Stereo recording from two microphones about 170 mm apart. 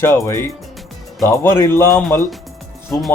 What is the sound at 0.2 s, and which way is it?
Speech, 20° left (ahead or behind).